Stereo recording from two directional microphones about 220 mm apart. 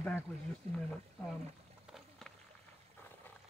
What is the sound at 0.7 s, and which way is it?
Speech, 30° right (ahead or behind).